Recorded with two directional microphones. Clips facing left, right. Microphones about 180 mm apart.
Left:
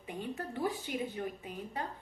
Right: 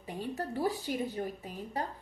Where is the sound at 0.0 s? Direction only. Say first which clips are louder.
Right 3 dB; 40° right (ahead or behind).